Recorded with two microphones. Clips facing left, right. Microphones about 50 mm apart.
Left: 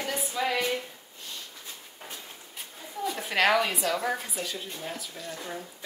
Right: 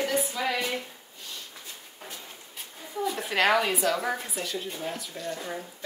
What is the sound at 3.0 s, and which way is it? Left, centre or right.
Speech, centre.